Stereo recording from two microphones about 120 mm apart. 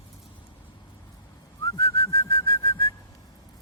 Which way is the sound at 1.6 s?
30° left (ahead or behind).